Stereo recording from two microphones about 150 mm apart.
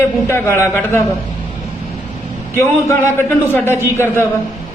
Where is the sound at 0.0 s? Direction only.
15° left (ahead or behind).